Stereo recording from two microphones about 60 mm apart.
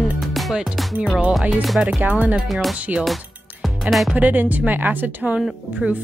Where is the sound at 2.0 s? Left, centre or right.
Right.